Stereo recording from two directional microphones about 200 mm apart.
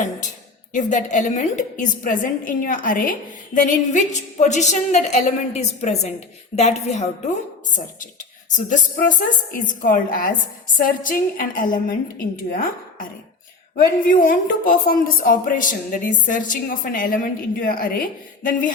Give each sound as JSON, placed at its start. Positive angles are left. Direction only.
{"t": 0.7, "sound": "a woman's voice", "side_deg": 40}
{"t": 8.4, "sound": "a woman's voice", "side_deg": 40}